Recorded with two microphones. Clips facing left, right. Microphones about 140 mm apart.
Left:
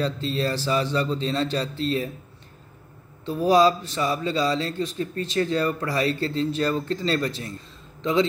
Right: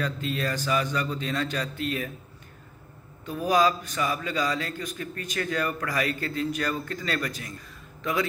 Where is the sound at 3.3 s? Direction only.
30° left (ahead or behind).